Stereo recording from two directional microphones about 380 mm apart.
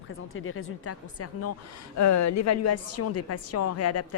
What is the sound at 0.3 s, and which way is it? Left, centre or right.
A woman's voice, left.